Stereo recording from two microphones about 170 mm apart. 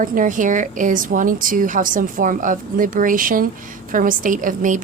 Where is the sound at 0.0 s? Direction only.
50° right (ahead or behind).